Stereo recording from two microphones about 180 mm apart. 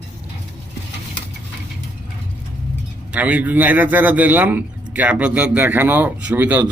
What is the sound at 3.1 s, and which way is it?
A man's voice, 5° right (ahead or behind).